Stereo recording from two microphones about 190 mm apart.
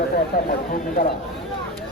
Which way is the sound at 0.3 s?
50° left (ahead or behind).